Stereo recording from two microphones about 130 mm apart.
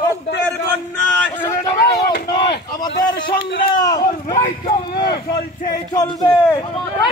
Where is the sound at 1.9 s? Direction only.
35° left (ahead or behind).